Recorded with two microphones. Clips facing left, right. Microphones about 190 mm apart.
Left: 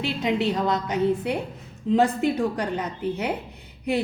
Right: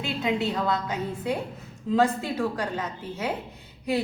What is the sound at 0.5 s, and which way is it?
A woman's voice, 20° left (ahead or behind).